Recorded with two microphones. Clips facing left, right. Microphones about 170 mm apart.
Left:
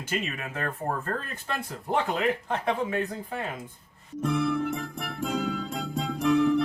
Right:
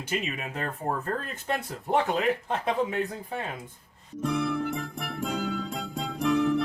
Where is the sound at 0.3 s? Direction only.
20° right (ahead or behind).